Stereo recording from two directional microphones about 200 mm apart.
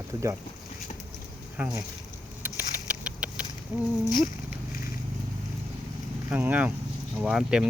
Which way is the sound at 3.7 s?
10° right (ahead or behind).